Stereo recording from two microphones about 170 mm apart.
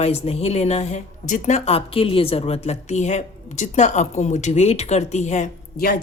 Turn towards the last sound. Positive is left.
turn(degrees=45)  # may be behind; listen again after turning